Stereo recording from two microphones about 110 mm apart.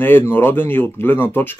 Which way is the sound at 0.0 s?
20° left (ahead or behind).